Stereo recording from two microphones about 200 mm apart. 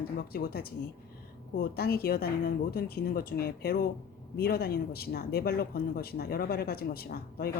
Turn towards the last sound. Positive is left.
turn(degrees=50)  # may be behind; listen again after turning